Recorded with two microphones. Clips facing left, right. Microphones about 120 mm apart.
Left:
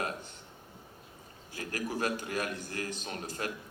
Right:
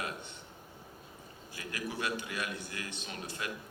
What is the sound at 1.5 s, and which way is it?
A man's voice, 45° left (ahead or behind).